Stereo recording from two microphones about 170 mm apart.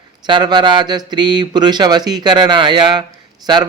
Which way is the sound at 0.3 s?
25° right (ahead or behind).